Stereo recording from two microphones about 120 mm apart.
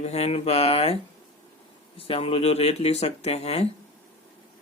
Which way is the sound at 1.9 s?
50° left (ahead or behind).